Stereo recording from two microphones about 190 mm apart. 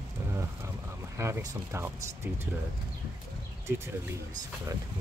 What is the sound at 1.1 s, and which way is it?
Speech, 15° right (ahead or behind).